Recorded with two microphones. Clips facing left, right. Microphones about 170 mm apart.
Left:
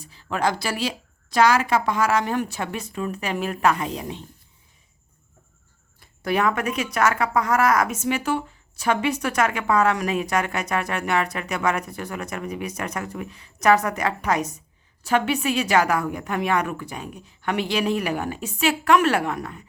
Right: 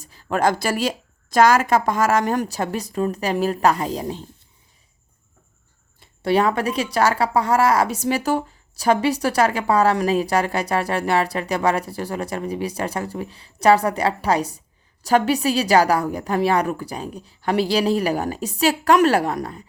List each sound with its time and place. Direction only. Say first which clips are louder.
0.0 s a woman's voice: right 4 dB; 45° right (ahead or behind)
6.0 s speech: right 4 dB; 30° right (ahead or behind)